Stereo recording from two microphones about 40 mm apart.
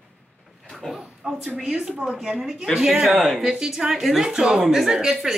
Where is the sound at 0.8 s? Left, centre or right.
Centre.